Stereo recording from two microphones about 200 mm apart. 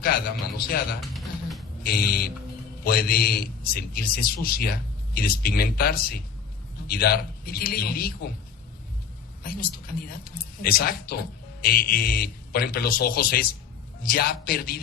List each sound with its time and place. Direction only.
0.0 s a man's voice: 50° left (ahead or behind)
1.1 s a sound: centre (ahead or behind)
1.8 s a man's voice: 50° left (ahead or behind)
9.4 s a man's voice: 50° left (ahead or behind)